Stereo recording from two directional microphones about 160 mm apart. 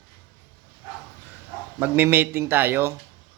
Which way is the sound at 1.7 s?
10° right (ahead or behind).